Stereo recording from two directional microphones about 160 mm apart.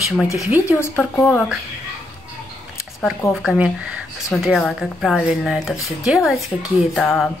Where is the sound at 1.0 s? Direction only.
5° left (ahead or behind).